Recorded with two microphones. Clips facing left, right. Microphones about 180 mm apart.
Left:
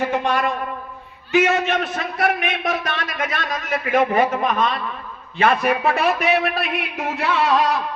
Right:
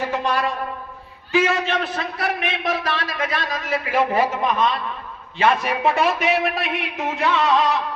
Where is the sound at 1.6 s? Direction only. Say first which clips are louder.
Left 1 dB; 30° right (ahead or behind).